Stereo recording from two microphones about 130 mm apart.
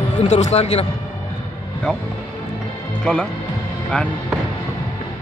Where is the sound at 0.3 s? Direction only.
60° left (ahead or behind).